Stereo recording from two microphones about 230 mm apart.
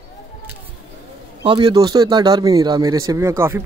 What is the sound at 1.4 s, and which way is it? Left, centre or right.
Speech, centre.